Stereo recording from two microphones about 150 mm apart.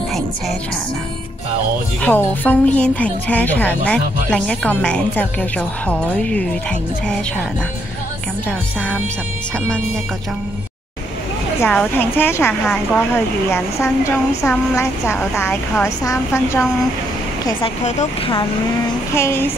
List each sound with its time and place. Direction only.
2.0 s speech: 10° left (ahead or behind)
11.6 s speech: 10° left (ahead or behind)
12.6 s speech: 5° left (ahead or behind)
13.1 s speech: 15° left (ahead or behind)
17.8 s speech: 50° left (ahead or behind)
19.1 s speech: 15° left (ahead or behind)